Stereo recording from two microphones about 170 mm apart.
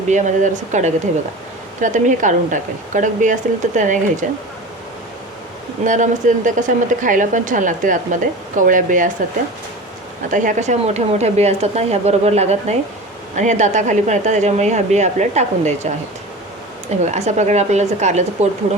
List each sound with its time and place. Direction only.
0.1 s a woman's voice: 45° right (ahead or behind)
5.8 s a woman's voice: 50° right (ahead or behind)
10.2 s a woman's voice: 50° right (ahead or behind)
17.1 s a woman's voice: 40° right (ahead or behind)